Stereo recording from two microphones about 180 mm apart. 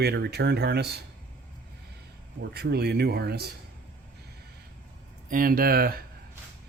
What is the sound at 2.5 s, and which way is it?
Speech, 60° right (ahead or behind).